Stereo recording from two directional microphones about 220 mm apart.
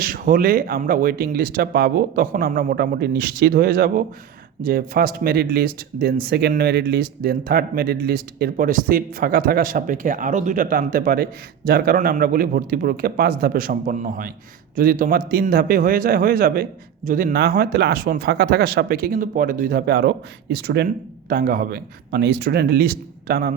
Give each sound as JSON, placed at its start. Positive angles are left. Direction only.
{"t": 0.0, "sound": "speech", "side_deg": -40}